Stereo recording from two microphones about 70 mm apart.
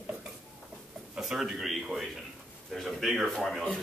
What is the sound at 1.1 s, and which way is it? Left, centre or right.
A man's voice, centre.